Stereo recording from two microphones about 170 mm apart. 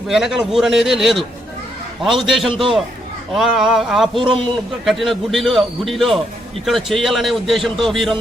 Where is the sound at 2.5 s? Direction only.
30° right (ahead or behind).